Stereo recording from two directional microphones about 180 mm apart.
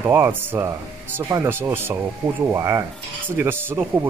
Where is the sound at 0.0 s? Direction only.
10° right (ahead or behind).